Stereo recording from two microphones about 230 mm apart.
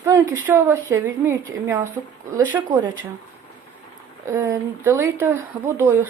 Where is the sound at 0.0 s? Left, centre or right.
Centre.